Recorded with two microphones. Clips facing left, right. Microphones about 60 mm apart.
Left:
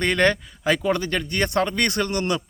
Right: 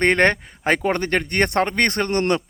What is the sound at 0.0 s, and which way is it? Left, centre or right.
Speech, right.